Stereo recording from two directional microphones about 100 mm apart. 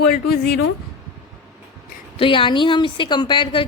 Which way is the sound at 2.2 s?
60° left (ahead or behind).